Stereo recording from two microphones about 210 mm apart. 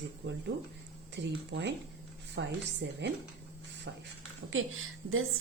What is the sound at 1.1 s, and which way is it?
Speech, 55° right (ahead or behind).